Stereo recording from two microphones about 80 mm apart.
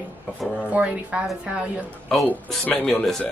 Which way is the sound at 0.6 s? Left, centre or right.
Centre.